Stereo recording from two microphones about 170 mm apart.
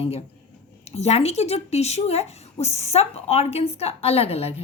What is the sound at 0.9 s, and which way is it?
Speech, 40° left (ahead or behind).